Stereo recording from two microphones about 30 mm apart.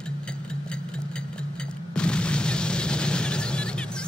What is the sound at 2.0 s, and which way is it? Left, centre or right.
Explosion, left.